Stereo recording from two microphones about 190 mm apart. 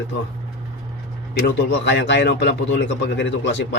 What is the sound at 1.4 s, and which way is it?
A man's voice, 70° left (ahead or behind).